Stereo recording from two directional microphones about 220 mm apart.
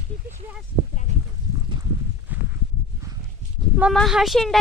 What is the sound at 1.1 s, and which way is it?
Sheep, 30° right (ahead or behind).